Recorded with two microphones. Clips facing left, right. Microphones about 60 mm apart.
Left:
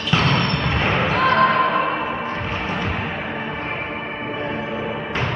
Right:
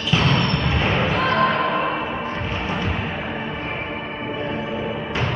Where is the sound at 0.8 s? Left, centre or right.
Left.